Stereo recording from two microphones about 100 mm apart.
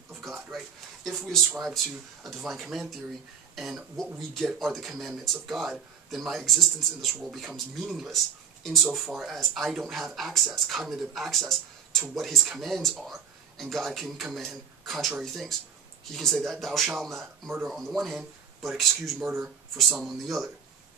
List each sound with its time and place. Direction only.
0.1 s a sound: centre (ahead or behind)
1.0 s speech: centre (ahead or behind)
19.2 s speech: 20° right (ahead or behind)
19.8 s speech: centre (ahead or behind)